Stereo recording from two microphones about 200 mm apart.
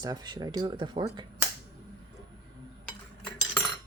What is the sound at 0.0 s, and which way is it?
Speech, 20° right (ahead or behind).